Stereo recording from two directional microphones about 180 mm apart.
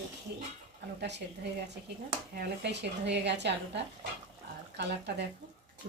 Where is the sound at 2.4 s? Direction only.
70° right (ahead or behind).